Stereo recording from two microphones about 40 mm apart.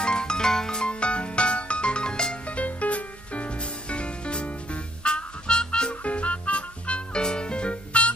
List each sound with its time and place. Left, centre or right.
0.0 s music: centre
2.5 s music: left; by 5.9 s centre
6.0 s music: left